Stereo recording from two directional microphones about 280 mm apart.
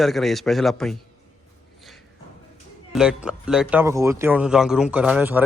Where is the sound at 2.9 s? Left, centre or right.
Centre.